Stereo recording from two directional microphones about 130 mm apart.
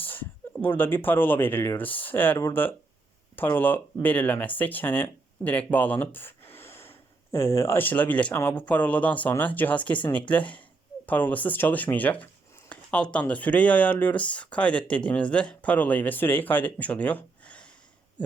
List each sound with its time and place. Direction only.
0.0 s speech: 15° left (ahead or behind)